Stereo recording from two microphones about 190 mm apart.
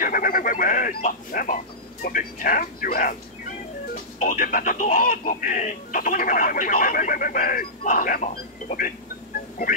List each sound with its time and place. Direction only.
0.0 s speech: 45° left (ahead or behind)